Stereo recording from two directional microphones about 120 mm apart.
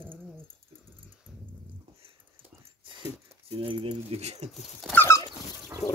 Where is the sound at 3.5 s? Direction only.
50° right (ahead or behind); by 4.4 s 65° right (ahead or behind).